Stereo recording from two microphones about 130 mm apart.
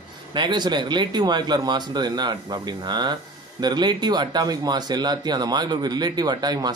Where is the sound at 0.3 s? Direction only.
35° right (ahead or behind).